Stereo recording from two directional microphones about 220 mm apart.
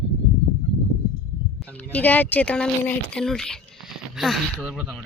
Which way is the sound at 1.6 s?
5° left (ahead or behind).